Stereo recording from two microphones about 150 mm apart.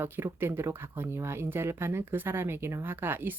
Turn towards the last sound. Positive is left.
turn(degrees=-15)  # may be behind; listen again after turning